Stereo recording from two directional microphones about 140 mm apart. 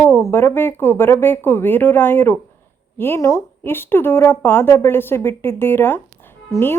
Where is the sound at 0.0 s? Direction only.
20° left (ahead or behind).